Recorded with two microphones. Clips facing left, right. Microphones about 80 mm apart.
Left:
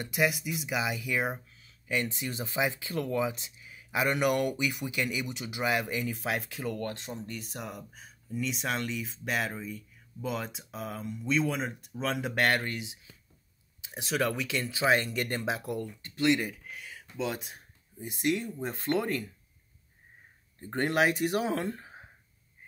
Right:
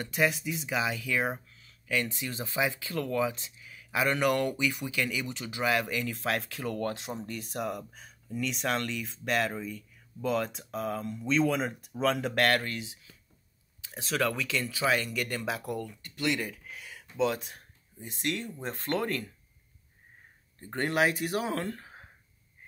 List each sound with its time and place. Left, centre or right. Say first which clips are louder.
0.1 s speech: even; centre
1.6 s a sound: even; left
2.5 s speech: even; centre
6.6 s speech: right 2 dB; centre; by 16.3 s left
16.3 s a sound: left 1 dB; centre
17.2 s speech: right 5 dB; centre
20.7 s speech: left 1 dB; left